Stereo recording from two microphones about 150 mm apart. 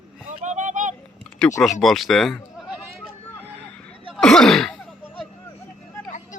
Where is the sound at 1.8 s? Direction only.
Centre (ahead or behind).